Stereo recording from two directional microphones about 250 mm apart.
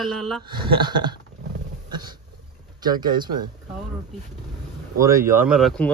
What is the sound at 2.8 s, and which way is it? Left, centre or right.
Speech, centre.